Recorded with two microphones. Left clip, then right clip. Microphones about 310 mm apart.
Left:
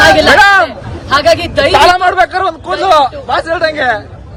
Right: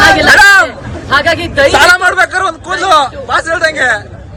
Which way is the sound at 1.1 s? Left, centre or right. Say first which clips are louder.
Left 1 dB; centre.